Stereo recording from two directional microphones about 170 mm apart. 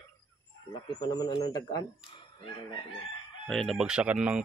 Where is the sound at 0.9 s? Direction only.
25° left (ahead or behind).